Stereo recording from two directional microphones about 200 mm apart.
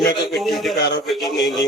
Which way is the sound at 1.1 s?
Centre (ahead or behind).